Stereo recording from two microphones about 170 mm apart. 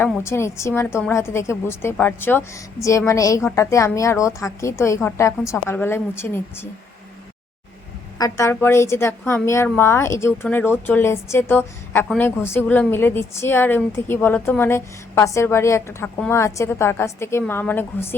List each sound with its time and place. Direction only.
0.3 s a woman's voice: 15° left (ahead or behind)
8.2 s a woman's voice: 15° left (ahead or behind)